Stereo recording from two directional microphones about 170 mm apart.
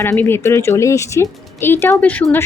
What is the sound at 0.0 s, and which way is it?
A woman's voice, 15° left (ahead or behind).